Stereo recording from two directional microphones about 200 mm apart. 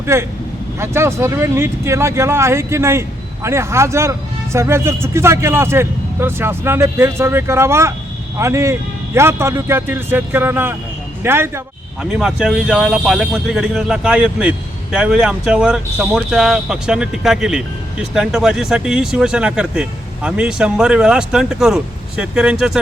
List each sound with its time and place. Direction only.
0.0 s speech: 15° right (ahead or behind)